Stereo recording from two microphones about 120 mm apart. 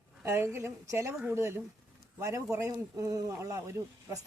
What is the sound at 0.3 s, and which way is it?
Speech, 20° right (ahead or behind).